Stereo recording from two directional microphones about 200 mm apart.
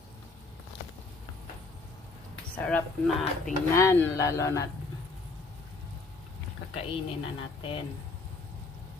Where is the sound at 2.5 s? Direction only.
5° left (ahead or behind).